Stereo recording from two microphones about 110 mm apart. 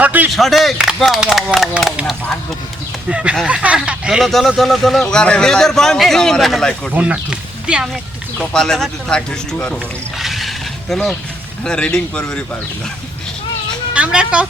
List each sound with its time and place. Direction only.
0.0 s speech: 15° right (ahead or behind)
0.3 s speech: centre (ahead or behind)
3.1 s speech: 10° right (ahead or behind)
6.9 s speech: 10° right (ahead or behind)
8.4 s speech: 5° left (ahead or behind)
10.2 s a sound: centre (ahead or behind)
11.6 s a man's voice: 10° left (ahead or behind)
13.9 s a sound: 10° right (ahead or behind)